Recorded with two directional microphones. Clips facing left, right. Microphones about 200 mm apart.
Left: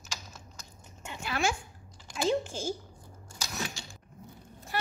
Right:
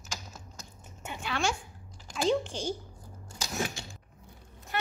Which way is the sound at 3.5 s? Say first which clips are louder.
Right 5 dB; 50° right (ahead or behind).